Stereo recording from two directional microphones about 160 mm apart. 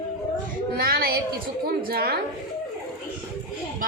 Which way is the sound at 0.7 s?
70° right (ahead or behind).